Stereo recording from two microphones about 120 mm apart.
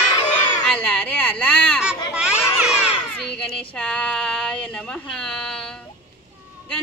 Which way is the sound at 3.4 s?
10° left (ahead or behind).